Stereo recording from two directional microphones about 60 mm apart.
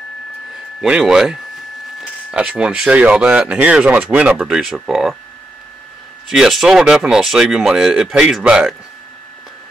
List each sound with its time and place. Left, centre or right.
1.0 s speech: centre
2.3 s speech: centre
4.3 s speech: centre
6.2 s speech: centre